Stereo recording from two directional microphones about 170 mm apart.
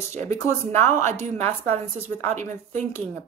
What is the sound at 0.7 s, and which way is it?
Speech, 15° left (ahead or behind).